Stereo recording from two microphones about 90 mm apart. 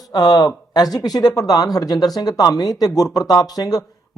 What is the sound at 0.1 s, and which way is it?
Speech, 45° left (ahead or behind).